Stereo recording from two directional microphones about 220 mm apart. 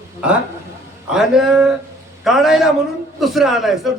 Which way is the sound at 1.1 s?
Centre (ahead or behind).